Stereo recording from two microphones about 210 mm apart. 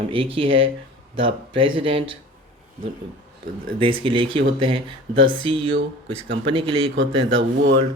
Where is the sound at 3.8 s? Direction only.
25° right (ahead or behind).